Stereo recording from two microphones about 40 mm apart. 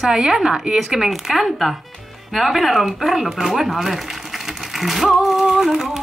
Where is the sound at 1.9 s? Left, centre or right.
Centre.